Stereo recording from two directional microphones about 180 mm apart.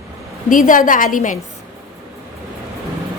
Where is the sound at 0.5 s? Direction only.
45° left (ahead or behind).